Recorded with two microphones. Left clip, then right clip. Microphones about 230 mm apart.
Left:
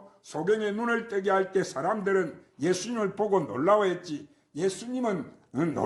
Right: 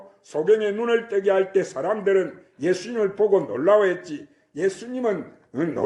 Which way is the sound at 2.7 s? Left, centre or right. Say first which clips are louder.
Right 4 dB; left.